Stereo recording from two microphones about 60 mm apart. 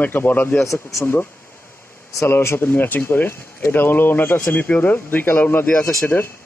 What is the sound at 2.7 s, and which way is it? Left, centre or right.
Speech, left.